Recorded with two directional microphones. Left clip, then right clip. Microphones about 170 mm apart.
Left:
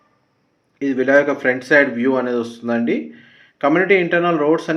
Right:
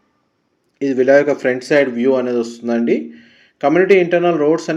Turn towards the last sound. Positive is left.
turn(degrees=-35)  # may be behind; listen again after turning